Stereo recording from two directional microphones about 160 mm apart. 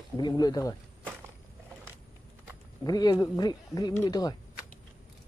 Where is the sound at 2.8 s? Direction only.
25° left (ahead or behind).